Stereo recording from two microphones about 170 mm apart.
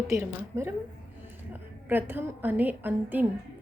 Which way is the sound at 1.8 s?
10° right (ahead or behind).